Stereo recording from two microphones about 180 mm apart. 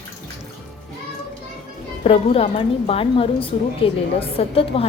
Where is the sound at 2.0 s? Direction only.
35° left (ahead or behind).